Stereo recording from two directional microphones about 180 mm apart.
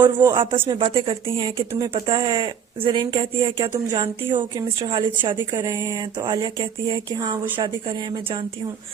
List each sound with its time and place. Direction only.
0.0 s speech: 10° right (ahead or behind)
0.7 s speech: 30° right (ahead or behind)
5.4 s speech: 15° right (ahead or behind)